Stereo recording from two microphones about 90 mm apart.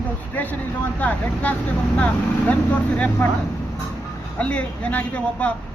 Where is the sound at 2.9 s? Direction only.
15° left (ahead or behind).